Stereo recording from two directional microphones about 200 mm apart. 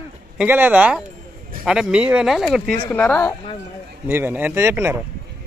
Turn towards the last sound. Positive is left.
turn(degrees=-10)  # may be behind; listen again after turning